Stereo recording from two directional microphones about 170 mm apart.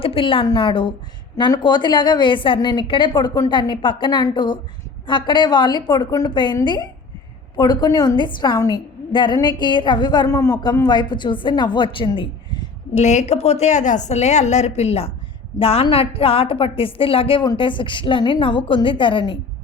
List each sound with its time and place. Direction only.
0.0 s a woman's voice: 30° left (ahead or behind)
12.9 s a woman's voice: 40° left (ahead or behind)